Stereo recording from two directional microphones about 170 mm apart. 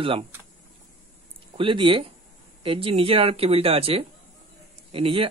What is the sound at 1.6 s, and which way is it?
Speech, 30° right (ahead or behind).